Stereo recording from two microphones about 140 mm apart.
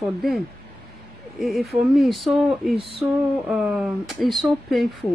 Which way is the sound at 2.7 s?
40° right (ahead or behind).